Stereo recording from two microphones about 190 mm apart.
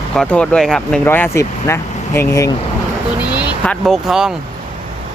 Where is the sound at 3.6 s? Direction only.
5° left (ahead or behind).